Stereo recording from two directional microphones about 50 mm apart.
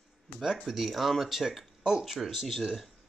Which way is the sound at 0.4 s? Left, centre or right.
Centre.